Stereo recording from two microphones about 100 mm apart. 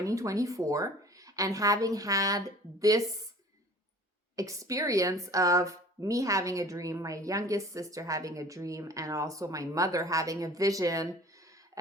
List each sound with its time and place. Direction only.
0.0 s a woman's voice: 35° right (ahead or behind)
4.4 s a woman's voice: 35° right (ahead or behind)